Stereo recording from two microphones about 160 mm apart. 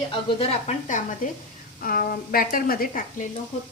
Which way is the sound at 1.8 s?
65° left (ahead or behind).